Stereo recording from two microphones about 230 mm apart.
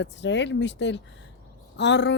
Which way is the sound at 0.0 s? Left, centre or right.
Left.